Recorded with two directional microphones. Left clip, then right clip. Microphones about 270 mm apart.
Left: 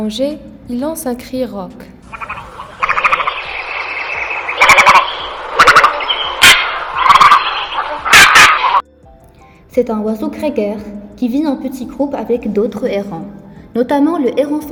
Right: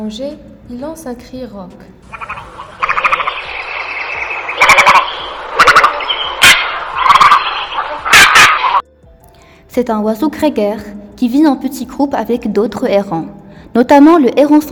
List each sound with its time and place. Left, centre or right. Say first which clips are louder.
0.0 s a woman's voice: left 5 dB; left
2.1 s frog: even; centre
9.7 s a woman's voice: right 1 dB; right